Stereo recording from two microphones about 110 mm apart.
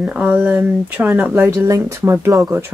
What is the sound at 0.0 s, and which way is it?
Speech, 10° right (ahead or behind).